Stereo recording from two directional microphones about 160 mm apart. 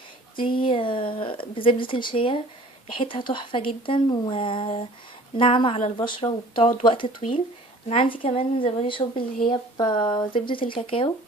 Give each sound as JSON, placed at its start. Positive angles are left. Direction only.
{"t": 0.6, "sound": "speech", "side_deg": 30}